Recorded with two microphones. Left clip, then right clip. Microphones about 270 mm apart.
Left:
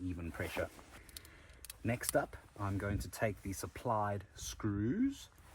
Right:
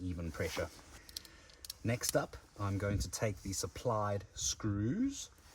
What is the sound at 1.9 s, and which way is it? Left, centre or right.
Speech, centre.